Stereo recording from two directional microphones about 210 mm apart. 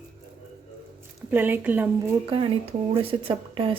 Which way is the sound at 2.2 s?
25° right (ahead or behind).